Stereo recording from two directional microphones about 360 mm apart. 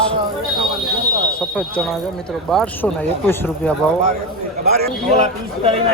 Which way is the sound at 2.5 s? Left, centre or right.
Centre.